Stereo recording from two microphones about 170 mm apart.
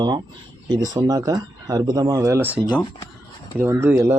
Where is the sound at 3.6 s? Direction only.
15° right (ahead or behind).